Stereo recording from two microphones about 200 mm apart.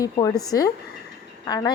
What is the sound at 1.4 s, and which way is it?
Speech, 20° left (ahead or behind).